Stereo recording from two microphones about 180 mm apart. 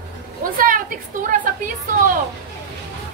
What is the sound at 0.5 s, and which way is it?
Speech, 50° right (ahead or behind).